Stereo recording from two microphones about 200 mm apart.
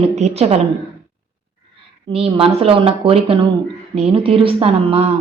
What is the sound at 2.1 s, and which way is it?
A woman's voice, 30° right (ahead or behind).